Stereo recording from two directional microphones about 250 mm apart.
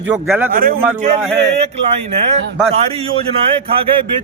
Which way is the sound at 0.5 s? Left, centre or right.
Right.